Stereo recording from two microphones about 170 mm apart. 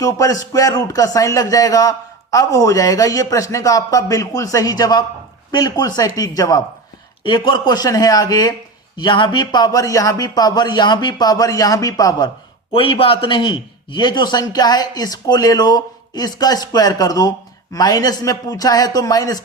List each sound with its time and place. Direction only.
0.0 s a man's voice: 20° left (ahead or behind)
12.7 s a man's voice: 30° left (ahead or behind)